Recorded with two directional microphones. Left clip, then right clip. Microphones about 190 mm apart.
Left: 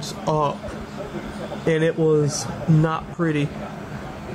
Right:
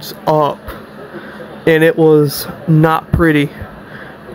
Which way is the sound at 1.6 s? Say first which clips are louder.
Right 10 dB; 45° right (ahead or behind).